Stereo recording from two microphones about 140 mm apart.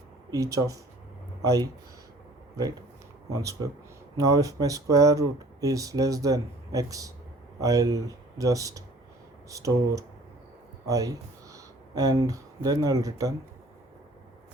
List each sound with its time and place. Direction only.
0.3 s speech: 25° right (ahead or behind)
3.2 s speech: 25° right (ahead or behind)